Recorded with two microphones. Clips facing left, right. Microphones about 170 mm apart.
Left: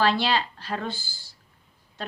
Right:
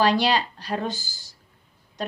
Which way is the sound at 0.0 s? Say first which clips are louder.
Right 3 dB; 15° right (ahead or behind).